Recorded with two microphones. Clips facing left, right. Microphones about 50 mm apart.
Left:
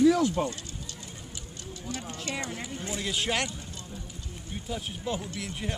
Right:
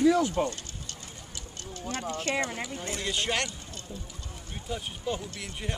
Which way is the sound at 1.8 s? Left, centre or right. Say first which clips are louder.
Right 5 dB; right.